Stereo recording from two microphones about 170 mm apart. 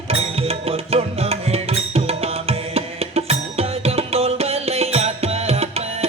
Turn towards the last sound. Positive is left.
turn(degrees=-35)  # may be behind; listen again after turning